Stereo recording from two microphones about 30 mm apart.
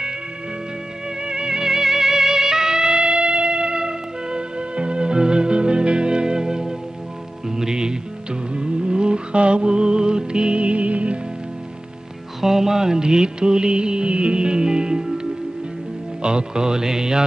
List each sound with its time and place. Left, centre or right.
1.2 s music: right
12.4 s music: centre
16.2 s music: right